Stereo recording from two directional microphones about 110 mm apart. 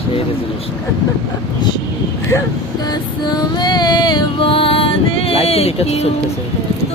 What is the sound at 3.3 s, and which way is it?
Music, 40° left (ahead or behind).